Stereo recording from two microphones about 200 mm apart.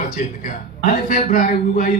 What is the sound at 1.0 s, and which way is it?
Speech, 40° left (ahead or behind).